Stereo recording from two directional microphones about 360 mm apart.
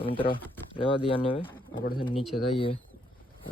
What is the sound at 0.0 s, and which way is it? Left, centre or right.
Speech, centre.